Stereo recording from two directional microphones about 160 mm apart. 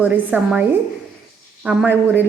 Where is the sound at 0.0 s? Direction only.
10° right (ahead or behind).